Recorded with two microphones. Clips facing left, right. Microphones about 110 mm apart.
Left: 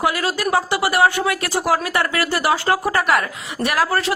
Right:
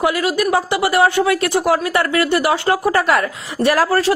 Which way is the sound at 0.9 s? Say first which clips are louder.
Right 3 dB; 25° right (ahead or behind).